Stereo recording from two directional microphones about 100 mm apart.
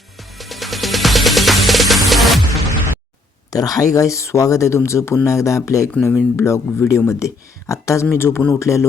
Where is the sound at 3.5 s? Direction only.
35° left (ahead or behind).